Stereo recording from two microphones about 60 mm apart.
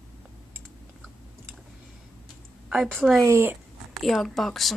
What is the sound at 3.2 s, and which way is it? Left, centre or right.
Speech, right.